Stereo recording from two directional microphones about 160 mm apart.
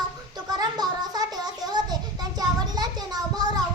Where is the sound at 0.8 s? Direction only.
25° right (ahead or behind).